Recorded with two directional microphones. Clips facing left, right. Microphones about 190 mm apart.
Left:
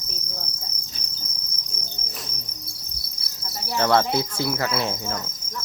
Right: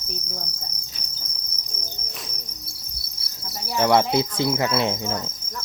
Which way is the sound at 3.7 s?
15° right (ahead or behind).